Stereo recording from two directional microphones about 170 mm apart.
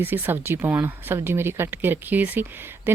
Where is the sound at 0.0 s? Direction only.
10° right (ahead or behind).